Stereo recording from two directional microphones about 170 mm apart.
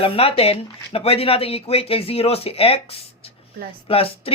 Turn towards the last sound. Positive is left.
turn(degrees=35)  # may be behind; listen again after turning